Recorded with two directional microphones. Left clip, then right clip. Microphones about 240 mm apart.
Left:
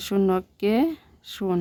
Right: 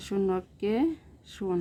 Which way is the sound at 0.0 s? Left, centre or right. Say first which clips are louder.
Left 6 dB; left.